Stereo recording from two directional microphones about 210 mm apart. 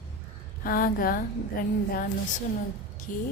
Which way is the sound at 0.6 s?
45° left (ahead or behind).